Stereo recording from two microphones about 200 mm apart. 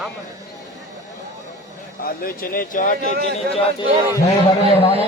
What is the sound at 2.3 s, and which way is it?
Speech, 45° left (ahead or behind).